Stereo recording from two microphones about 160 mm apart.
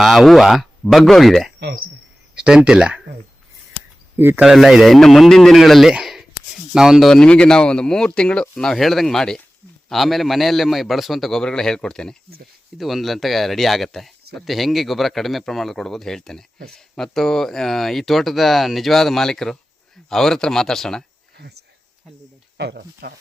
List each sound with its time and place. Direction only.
0.0 s speech: centre (ahead or behind)
1.5 s speech: 90° right
2.3 s speech: 5° right (ahead or behind)
4.2 s speech: 15° right (ahead or behind)
4.4 s speech: centre (ahead or behind)
22.5 s speech: 90° right